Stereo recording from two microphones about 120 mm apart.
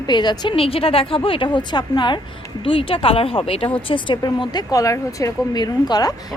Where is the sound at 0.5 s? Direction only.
50° left (ahead or behind).